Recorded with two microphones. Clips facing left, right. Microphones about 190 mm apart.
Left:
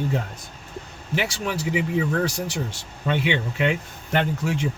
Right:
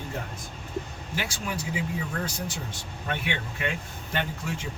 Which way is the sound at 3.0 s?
75° left (ahead or behind).